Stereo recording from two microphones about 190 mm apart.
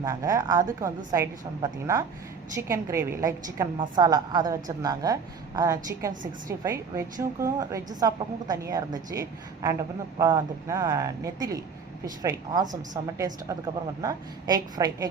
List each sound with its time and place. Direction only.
0.0 s a woman's voice: 15° right (ahead or behind)